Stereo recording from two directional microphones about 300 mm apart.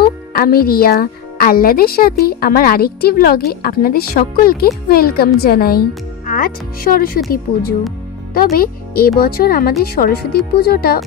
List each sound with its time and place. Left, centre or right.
0.3 s a woman's voice: left